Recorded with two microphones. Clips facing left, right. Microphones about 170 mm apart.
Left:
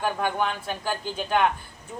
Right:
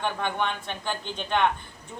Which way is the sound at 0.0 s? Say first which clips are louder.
Left 2 dB; 5° left (ahead or behind).